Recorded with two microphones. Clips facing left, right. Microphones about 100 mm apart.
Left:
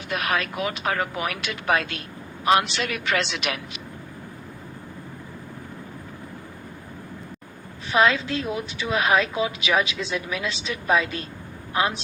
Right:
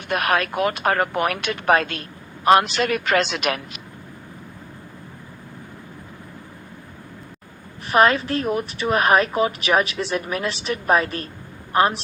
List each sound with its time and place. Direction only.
0.1 s speech: 55° right (ahead or behind)
7.9 s speech: 40° right (ahead or behind)